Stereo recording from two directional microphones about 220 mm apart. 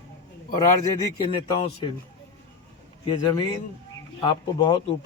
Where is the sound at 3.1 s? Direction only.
20° left (ahead or behind).